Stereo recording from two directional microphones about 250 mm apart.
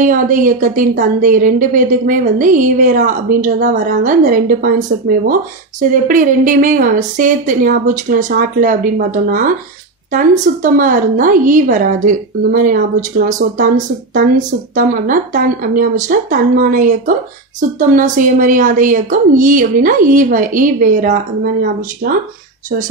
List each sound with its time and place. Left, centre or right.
0.0 s speech: right
14.8 s speech: right